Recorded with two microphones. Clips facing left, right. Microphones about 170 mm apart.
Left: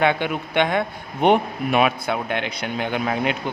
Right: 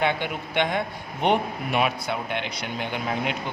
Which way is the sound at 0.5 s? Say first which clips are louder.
Left 4 dB; 60° left (ahead or behind).